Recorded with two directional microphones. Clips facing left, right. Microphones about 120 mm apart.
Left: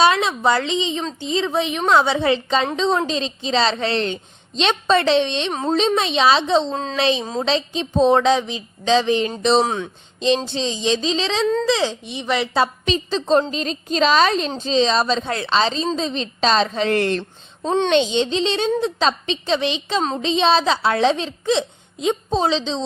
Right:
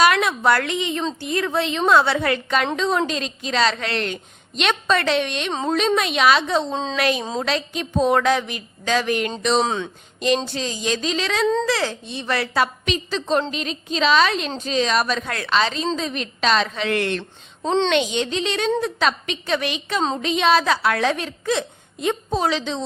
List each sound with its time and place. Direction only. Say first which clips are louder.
0.0 s a woman's voice: left 1 dB; 25° left (ahead or behind)
6.7 s speech: even; 5° left (ahead or behind)
6.9 s speech: left 3 dB; 25° left (ahead or behind)
9.6 s a woman's voice: even; 10° left (ahead or behind)
10.2 s a woman's voice: left 2 dB; 25° left (ahead or behind)